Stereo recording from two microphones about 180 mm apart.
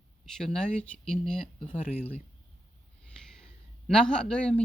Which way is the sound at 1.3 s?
30° left (ahead or behind).